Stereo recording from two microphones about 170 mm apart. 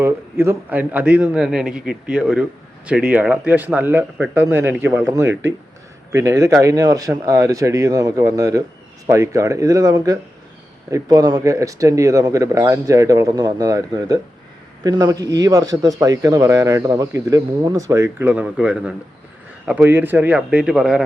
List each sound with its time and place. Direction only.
0.0 s a man's voice: 15° right (ahead or behind)